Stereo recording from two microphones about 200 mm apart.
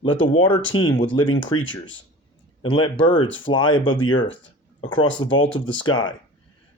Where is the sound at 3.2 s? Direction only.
70° left (ahead or behind).